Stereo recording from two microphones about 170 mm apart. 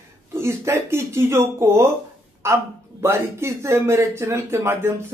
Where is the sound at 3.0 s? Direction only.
15° right (ahead or behind).